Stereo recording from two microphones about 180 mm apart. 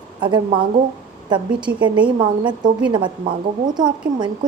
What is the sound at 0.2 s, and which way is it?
A woman's voice, 25° right (ahead or behind).